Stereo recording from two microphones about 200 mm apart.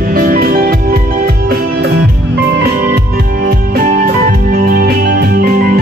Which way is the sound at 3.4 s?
45° right (ahead or behind).